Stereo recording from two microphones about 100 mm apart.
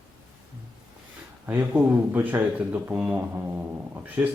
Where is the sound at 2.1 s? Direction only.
20° right (ahead or behind).